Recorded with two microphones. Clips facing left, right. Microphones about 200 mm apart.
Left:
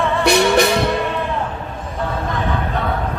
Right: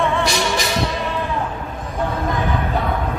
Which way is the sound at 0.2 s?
60° left (ahead or behind).